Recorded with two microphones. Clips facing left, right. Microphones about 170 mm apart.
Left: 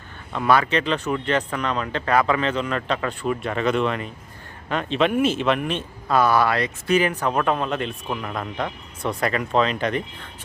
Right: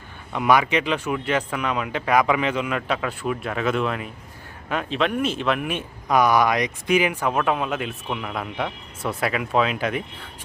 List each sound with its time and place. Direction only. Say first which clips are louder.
0.3 s speech: even; 15° right (ahead or behind)